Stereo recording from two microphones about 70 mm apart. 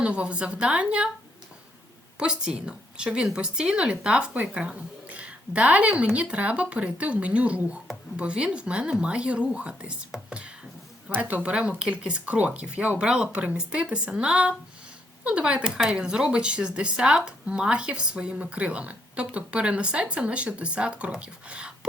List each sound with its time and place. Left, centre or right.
0.0 s speech: centre
2.1 s speech: centre